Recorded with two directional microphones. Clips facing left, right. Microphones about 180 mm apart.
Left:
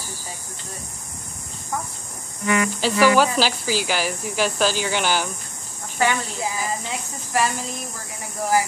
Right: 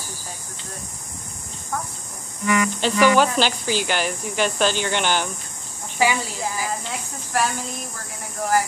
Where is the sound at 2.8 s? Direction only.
5° left (ahead or behind).